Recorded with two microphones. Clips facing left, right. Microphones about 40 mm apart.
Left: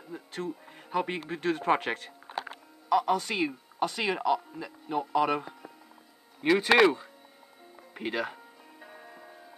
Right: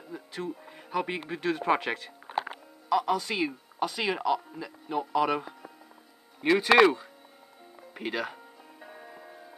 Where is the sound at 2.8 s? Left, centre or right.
Centre.